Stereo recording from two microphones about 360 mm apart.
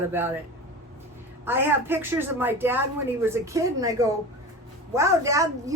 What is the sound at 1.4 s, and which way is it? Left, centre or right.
A woman's voice, centre.